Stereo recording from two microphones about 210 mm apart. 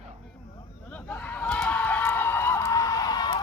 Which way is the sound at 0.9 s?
5° left (ahead or behind).